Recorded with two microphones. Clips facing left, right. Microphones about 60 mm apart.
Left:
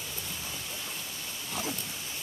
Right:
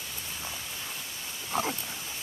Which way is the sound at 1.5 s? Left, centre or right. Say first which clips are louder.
Right 6 dB; right.